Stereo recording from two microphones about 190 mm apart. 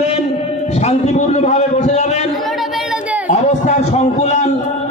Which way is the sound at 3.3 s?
35° left (ahead or behind).